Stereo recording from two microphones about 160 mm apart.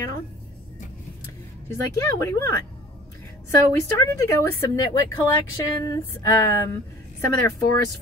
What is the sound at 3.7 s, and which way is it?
Speech, 15° left (ahead or behind).